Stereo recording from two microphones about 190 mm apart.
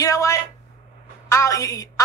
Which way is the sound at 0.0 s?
15° left (ahead or behind).